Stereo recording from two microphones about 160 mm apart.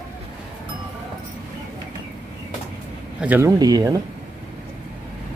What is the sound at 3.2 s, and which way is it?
Speech, 10° right (ahead or behind).